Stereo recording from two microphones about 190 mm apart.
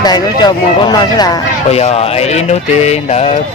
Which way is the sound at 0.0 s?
20° left (ahead or behind).